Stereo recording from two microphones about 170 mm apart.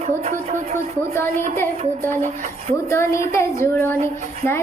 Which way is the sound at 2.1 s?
50° right (ahead or behind).